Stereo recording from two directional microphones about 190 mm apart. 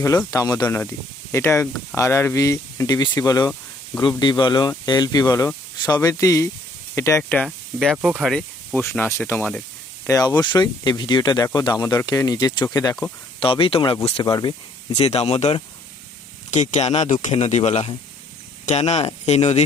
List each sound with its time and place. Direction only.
0.0 s speech: 15° left (ahead or behind)
8.8 s speech: 15° left (ahead or behind)
13.4 s speech: 30° left (ahead or behind)